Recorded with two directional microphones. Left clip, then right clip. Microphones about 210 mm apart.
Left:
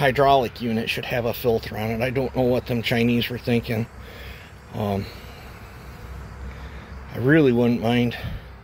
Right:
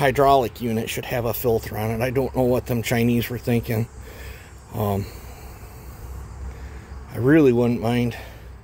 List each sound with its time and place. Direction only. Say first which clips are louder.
0.0 s speech: right 1 dB; 15° right (ahead or behind)
7.1 s speech: right 2 dB; 10° right (ahead or behind)